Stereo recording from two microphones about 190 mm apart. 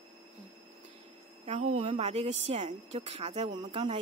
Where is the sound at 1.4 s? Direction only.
30° right (ahead or behind).